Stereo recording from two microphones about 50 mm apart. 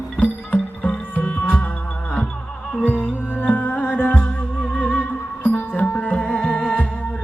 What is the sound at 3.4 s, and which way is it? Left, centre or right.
Music, left.